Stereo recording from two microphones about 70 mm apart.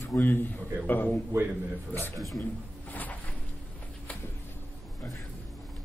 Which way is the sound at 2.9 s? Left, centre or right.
Left.